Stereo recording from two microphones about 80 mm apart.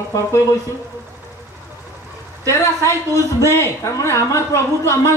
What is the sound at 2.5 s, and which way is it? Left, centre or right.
Speech, left.